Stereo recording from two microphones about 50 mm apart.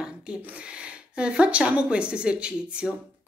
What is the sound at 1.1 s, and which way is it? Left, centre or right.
A woman's voice, right.